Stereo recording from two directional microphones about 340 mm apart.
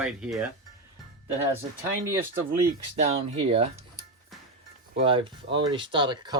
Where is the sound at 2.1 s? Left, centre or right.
Centre.